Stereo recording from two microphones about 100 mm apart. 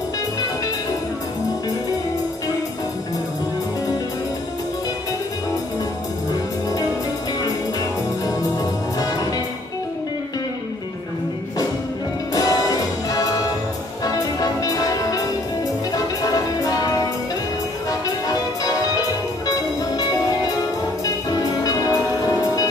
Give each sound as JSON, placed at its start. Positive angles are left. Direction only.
{"t": 12.4, "sound": "music", "side_deg": 35}